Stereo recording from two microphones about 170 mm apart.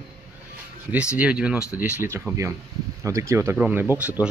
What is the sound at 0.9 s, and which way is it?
Speech, 5° right (ahead or behind).